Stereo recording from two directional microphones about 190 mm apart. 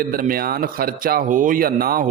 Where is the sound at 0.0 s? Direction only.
50° right (ahead or behind).